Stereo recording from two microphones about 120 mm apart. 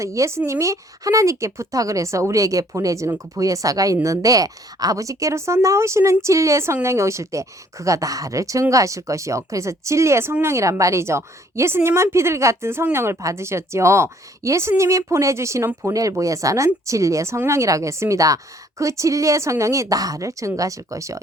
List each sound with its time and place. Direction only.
0.0 s a woman's voice: 25° right (ahead or behind)